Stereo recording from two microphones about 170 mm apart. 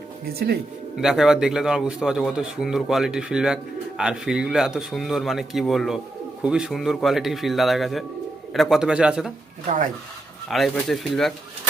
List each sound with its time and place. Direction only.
0.3 s speech: 65° right (ahead or behind)
0.9 s speech: centre (ahead or behind)
10.5 s speech: centre (ahead or behind)